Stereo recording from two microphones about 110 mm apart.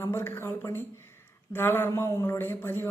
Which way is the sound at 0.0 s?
20° left (ahead or behind).